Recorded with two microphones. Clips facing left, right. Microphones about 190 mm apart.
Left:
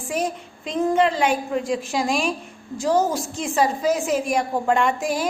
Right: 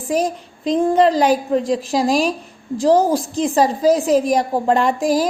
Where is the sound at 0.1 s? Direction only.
35° right (ahead or behind).